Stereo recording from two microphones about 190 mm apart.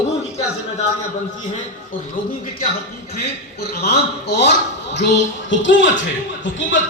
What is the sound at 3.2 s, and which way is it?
A man's voice, 55° left (ahead or behind).